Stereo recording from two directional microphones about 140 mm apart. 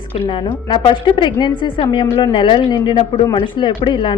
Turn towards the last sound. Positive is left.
turn(degrees=35)  # may be behind; listen again after turning